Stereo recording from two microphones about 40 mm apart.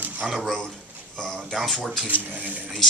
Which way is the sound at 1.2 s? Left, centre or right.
Centre.